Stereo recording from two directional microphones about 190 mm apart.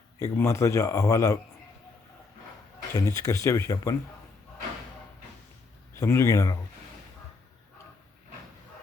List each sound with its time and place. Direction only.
0.2 s a man's voice: 15° left (ahead or behind)
2.9 s a man's voice: 20° left (ahead or behind)
6.0 s a man's voice: 15° left (ahead or behind)